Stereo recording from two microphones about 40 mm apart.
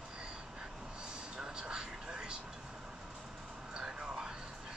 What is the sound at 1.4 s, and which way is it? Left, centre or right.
Vehicle, centre.